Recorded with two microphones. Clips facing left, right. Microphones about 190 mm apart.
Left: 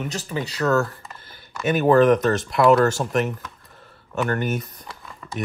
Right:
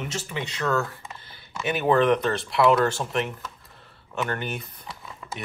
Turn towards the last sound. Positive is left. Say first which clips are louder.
# even
turn(degrees=-5)  # may be behind; listen again after turning